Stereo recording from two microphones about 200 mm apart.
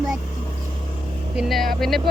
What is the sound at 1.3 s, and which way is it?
Speech, centre (ahead or behind).